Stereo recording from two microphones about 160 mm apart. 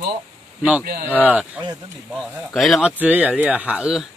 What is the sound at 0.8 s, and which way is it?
Speech, 70° right (ahead or behind).